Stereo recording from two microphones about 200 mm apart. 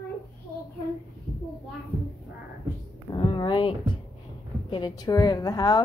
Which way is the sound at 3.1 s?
20° left (ahead or behind).